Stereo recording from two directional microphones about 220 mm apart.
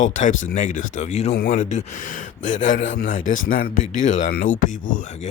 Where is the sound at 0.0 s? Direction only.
35° left (ahead or behind).